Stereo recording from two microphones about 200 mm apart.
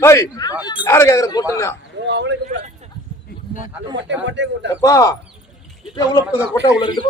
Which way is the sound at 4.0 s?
60° right (ahead or behind).